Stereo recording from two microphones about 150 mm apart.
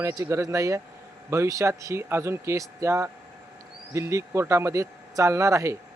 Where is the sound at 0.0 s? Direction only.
20° right (ahead or behind).